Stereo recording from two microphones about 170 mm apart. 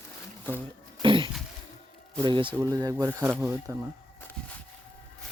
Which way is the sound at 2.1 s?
30° right (ahead or behind).